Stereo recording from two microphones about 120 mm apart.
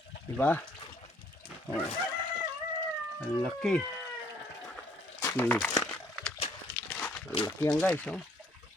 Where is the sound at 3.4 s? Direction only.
5° left (ahead or behind).